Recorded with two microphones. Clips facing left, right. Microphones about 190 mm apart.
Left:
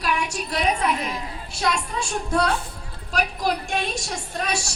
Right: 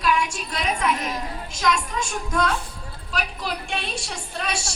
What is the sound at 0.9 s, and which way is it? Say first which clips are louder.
Speech: even; 45° right (ahead or behind).